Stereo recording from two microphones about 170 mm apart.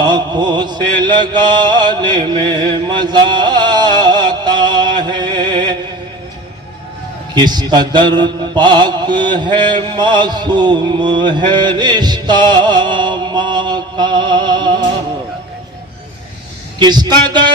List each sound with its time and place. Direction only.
0.0 s mantra: 25° right (ahead or behind)
7.3 s mantra: 25° right (ahead or behind)
16.8 s speech: 25° right (ahead or behind)